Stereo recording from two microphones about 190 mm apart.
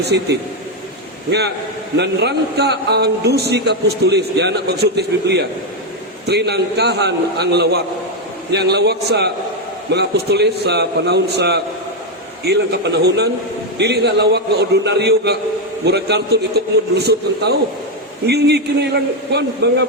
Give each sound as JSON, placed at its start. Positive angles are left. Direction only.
{"t": 0.1, "sound": "a man's voice", "side_deg": -65}
{"t": 1.3, "sound": "a man's voice", "side_deg": -60}